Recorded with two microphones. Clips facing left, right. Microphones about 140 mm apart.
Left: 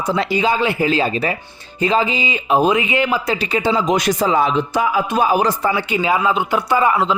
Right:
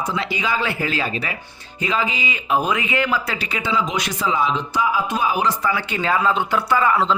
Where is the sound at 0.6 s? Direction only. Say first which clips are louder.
Left 6 dB; 20° left (ahead or behind); by 5.5 s 45° left (ahead or behind).